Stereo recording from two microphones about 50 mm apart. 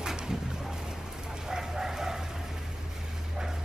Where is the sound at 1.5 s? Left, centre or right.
Centre.